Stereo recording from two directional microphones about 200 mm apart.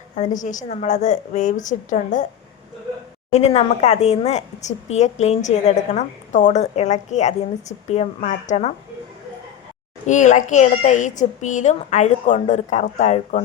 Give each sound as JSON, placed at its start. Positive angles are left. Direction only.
{"t": 0.2, "sound": "a woman's voice", "side_deg": 40}
{"t": 3.3, "sound": "a woman's voice", "side_deg": 35}
{"t": 10.1, "sound": "a woman's voice", "side_deg": 40}